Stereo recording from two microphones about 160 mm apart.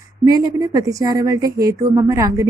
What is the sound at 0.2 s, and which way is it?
Speech, 25° right (ahead or behind).